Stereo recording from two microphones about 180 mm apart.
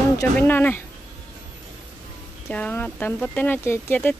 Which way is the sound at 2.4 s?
10° left (ahead or behind).